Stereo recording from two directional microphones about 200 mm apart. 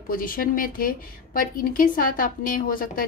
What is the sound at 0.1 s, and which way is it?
A woman's voice, 45° left (ahead or behind).